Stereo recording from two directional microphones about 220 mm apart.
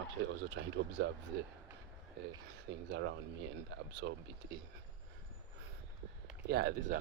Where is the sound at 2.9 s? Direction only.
55° right (ahead or behind).